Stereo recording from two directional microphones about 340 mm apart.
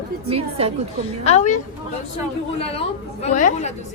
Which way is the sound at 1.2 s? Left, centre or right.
Centre.